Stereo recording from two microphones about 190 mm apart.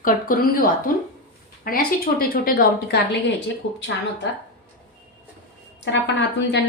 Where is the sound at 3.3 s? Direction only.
75° left (ahead or behind).